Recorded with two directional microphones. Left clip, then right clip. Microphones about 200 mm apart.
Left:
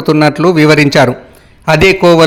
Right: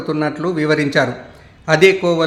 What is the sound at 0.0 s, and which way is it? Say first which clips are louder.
A man's voice: left 11 dB; 45° left (ahead or behind).